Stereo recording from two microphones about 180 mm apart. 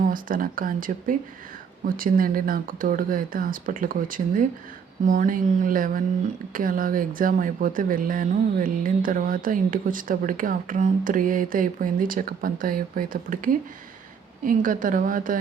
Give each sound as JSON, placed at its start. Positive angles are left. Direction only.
{"t": 0.0, "sound": "speech", "side_deg": -50}